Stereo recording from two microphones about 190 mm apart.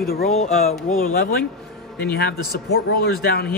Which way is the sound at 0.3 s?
35° left (ahead or behind).